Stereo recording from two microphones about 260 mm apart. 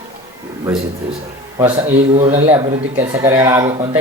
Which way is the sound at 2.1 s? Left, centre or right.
Right.